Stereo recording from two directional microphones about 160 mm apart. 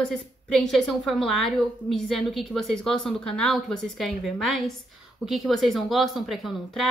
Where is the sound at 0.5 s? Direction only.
Centre (ahead or behind).